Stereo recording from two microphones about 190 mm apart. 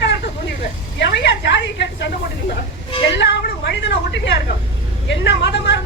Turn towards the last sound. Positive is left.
turn(degrees=65)  # may be behind; listen again after turning